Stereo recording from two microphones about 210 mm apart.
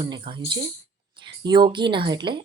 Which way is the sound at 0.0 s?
25° right (ahead or behind).